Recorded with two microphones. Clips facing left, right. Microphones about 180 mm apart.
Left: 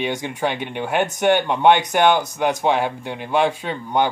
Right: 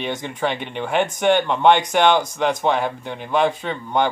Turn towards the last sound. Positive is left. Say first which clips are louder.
# even
turn(degrees=10)  # may be behind; listen again after turning